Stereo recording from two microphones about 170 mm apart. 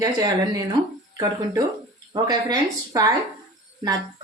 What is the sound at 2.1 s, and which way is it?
Speech, 25° right (ahead or behind).